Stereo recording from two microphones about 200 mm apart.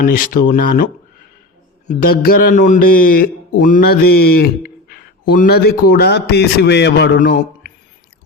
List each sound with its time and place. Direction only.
0.0 s a man's voice: 45° left (ahead or behind)
1.9 s a man's voice: 40° left (ahead or behind)